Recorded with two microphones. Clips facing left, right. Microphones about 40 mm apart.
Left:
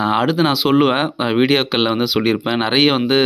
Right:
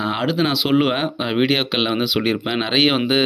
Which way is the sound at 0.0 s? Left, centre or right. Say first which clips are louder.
Left 4 dB; centre.